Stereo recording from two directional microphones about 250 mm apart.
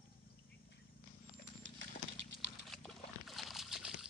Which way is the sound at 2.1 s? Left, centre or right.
Right.